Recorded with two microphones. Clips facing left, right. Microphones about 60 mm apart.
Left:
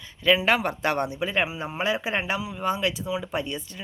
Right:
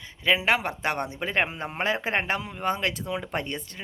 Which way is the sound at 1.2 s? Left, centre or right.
Right.